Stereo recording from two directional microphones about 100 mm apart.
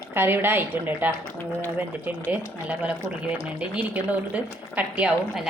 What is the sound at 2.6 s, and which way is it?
A woman's voice, 15° right (ahead or behind).